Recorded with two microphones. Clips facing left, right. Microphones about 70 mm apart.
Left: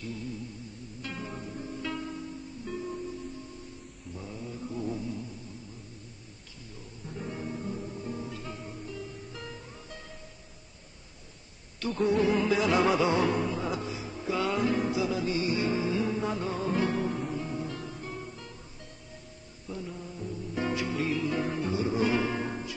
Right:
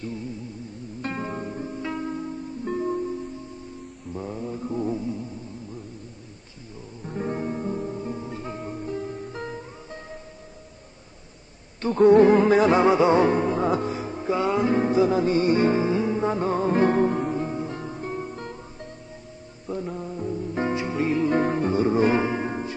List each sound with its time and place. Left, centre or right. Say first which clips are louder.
1.0 s music: right 9 dB; right
1.7 s music: right 4 dB; right
4.1 s mantra: right 9 dB; right
4.9 s music: right 6 dB; right
7.1 s music: right 9 dB; right
12.0 s music: right 11 dB; right
12.7 s music: right 7 dB; right
19.7 s music: right 8 dB; right
22.2 s music: right 5 dB; right